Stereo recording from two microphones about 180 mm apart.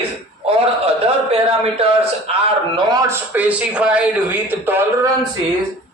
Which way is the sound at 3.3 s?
10° right (ahead or behind).